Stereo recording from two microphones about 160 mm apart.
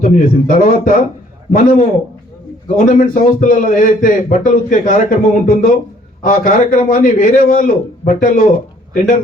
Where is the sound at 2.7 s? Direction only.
55° left (ahead or behind).